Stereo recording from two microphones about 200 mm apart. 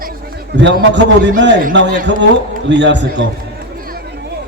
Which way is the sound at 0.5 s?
60° right (ahead or behind).